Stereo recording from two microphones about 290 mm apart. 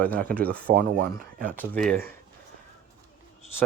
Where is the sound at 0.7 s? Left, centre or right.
Right.